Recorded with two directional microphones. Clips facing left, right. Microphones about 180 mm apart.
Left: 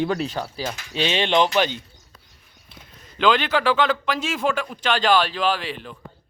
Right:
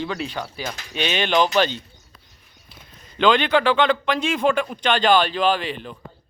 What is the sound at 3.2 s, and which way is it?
Speech, 5° left (ahead or behind).